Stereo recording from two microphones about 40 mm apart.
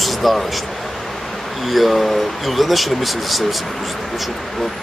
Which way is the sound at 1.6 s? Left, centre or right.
Centre.